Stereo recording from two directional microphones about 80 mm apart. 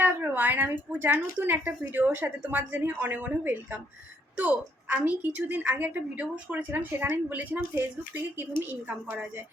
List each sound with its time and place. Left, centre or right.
0.0 s a woman's voice: right